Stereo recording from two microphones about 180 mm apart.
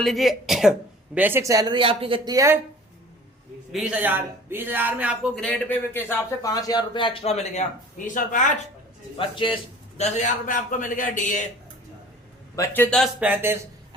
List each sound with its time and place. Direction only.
0.0 s speech: centre (ahead or behind); by 2.6 s 20° right (ahead or behind)
3.7 s a man's voice: 5° right (ahead or behind); by 8.5 s 45° left (ahead or behind)
9.1 s a man's voice: 30° left (ahead or behind)
10.0 s a man's voice: 40° left (ahead or behind)
12.5 s a man's voice: 10° left (ahead or behind)
13.0 s speech: 5° right (ahead or behind)